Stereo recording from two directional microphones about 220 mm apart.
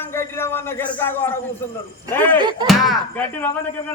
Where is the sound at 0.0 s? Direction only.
10° left (ahead or behind).